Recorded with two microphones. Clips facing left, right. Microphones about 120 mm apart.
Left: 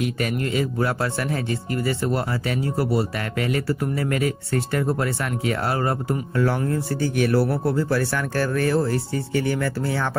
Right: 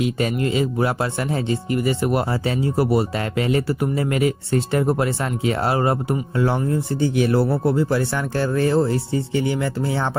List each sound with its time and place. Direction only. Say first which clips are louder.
0.0 s speech: right 3 dB; 20° right (ahead or behind)